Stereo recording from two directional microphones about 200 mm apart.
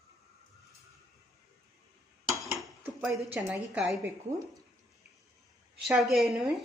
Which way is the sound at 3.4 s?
10° right (ahead or behind).